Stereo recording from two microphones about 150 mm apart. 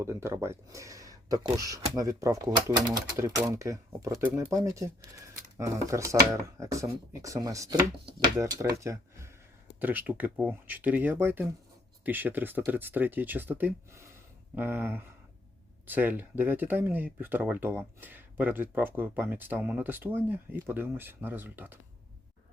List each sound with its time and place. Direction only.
0.0 s speech: 20° right (ahead or behind)
8.8 s a sound: 20° right (ahead or behind)
9.8 s speech: 10° right (ahead or behind)